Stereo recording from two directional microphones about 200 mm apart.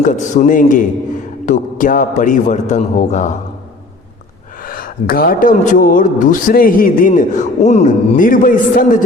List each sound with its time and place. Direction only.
0.0 s speech: 40° left (ahead or behind)
4.6 s speech: 45° left (ahead or behind)